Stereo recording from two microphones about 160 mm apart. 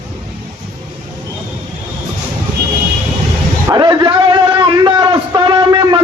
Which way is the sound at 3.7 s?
25° right (ahead or behind).